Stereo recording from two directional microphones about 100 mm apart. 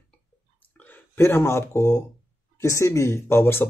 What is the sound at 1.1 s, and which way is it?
Speech, 25° left (ahead or behind).